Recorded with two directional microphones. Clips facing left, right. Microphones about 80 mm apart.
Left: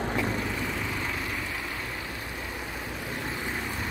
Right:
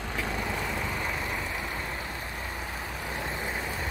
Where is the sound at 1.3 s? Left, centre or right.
Centre.